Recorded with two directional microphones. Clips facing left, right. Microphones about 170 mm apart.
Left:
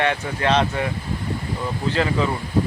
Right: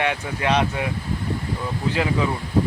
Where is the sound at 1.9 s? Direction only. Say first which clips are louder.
Left 1 dB; 10° right (ahead or behind).